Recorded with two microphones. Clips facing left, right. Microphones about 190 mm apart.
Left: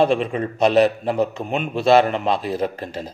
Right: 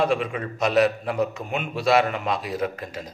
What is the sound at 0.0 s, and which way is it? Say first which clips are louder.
A man's voice: left 5 dB; 30° left (ahead or behind).